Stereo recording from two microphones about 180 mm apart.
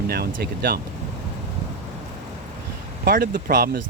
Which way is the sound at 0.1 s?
60° right (ahead or behind).